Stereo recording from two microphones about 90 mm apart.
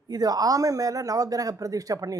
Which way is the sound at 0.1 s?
45° right (ahead or behind).